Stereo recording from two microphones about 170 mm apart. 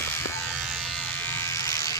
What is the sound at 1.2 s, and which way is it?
Electric shaver, 15° left (ahead or behind).